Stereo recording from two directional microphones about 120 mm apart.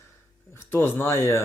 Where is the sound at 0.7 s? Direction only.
20° left (ahead or behind).